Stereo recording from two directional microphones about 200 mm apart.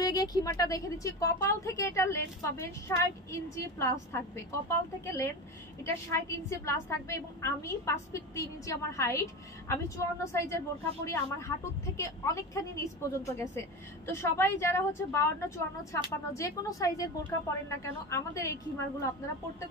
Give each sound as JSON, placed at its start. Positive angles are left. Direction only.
{"t": 0.0, "sound": "a woman's voice", "side_deg": 20}
{"t": 5.0, "sound": "a woman's voice", "side_deg": 15}